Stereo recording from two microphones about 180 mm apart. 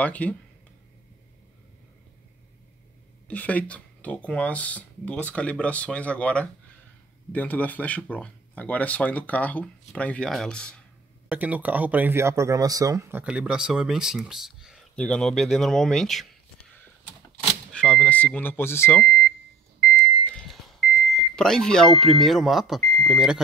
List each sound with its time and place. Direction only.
0.0 s speech: 10° left (ahead or behind)
3.3 s speech: 10° left (ahead or behind)
11.2 s speech: 10° right (ahead or behind)
17.7 s speech: 5° left (ahead or behind)
20.3 s smoke detector: centre (ahead or behind)
22.0 s speech: centre (ahead or behind)